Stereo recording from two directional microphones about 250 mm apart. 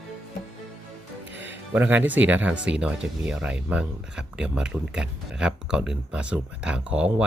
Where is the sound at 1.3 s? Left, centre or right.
Right.